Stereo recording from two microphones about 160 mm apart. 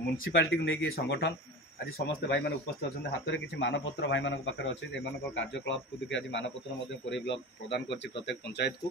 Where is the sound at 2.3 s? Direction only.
90° left.